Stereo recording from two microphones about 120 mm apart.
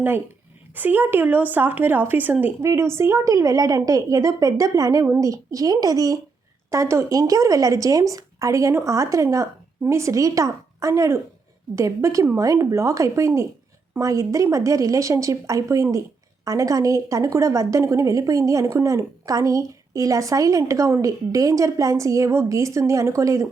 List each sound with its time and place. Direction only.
0.8 s speech: 15° right (ahead or behind)